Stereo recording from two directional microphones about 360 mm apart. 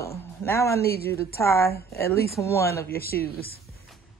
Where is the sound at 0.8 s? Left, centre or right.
Left.